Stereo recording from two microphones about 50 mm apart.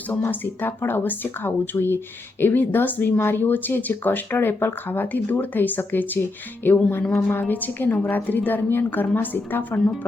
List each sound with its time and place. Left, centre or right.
0.3 s speech: left